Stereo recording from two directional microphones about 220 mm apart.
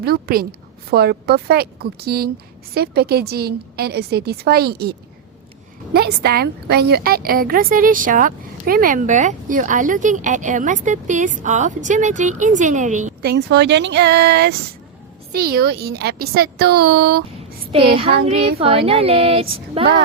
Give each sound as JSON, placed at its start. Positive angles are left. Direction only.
{"t": 0.0, "sound": "a woman's voice", "side_deg": -45}
{"t": 13.3, "sound": "a woman's voice", "side_deg": -50}
{"t": 18.3, "sound": "female singing", "side_deg": -25}